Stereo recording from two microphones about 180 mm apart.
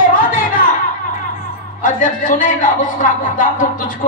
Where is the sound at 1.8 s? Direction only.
45° left (ahead or behind).